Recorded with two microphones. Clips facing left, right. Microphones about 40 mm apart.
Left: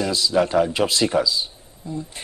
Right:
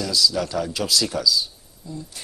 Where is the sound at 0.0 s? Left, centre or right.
Left.